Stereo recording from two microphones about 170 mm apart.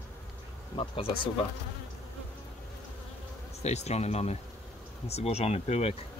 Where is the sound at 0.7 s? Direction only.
30° left (ahead or behind).